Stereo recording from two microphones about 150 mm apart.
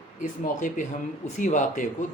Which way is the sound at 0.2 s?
60° left (ahead or behind).